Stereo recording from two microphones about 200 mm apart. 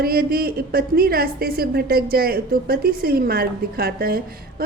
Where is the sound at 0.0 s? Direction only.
50° right (ahead or behind).